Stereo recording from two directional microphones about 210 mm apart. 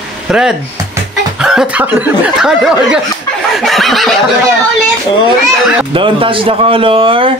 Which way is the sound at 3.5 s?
Centre (ahead or behind).